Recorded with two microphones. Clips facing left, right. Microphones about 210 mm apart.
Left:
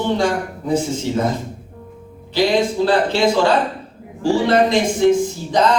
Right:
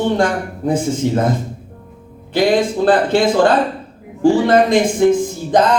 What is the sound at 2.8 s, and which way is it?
A man's voice, 50° right (ahead or behind).